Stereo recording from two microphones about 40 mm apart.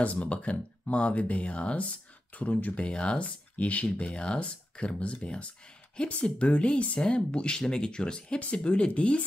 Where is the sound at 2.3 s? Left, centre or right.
Left.